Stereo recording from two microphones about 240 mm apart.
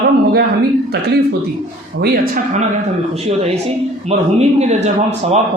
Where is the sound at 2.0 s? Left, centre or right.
Right.